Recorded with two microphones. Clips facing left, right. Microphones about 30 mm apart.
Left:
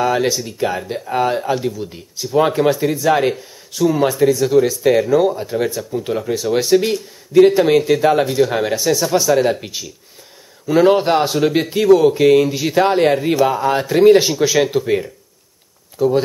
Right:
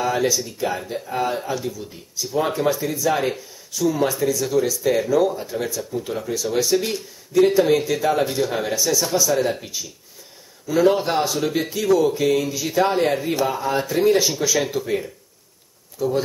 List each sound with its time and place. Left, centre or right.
0.0 s speech: left
3.3 s speech: left
4.9 s speech: centre
5.2 s speech: left
5.7 s speech: left
5.9 s speech: left
8.7 s speech: left
9.3 s speech: left
10.7 s speech: left